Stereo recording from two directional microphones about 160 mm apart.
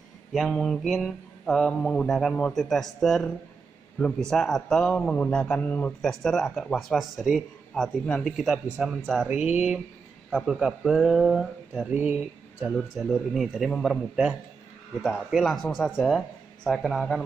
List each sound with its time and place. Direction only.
0.3 s a man's voice: centre (ahead or behind)
4.3 s a man's voice: 5° left (ahead or behind)